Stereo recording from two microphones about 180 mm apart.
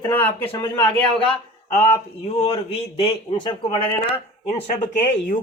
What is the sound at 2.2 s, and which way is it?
Speech, 35° left (ahead or behind).